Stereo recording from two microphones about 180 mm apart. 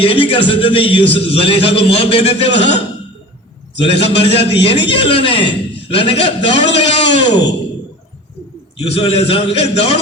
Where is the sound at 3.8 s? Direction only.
35° left (ahead or behind).